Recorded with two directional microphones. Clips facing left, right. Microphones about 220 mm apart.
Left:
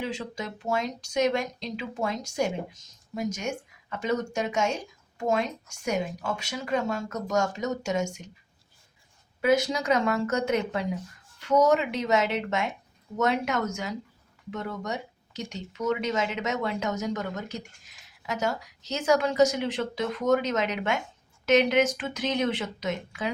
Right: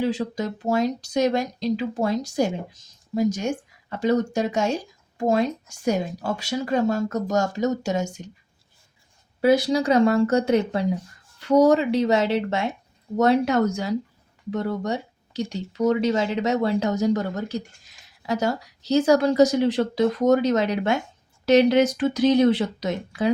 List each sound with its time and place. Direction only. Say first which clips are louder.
0.0 s speech: right 8 dB; 35° right (ahead or behind)
9.4 s speech: right 5 dB; 35° right (ahead or behind)